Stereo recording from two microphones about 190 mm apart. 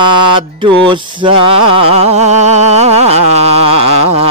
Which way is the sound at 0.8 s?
25° right (ahead or behind).